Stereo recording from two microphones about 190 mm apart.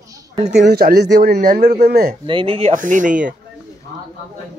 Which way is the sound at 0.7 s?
55° right (ahead or behind).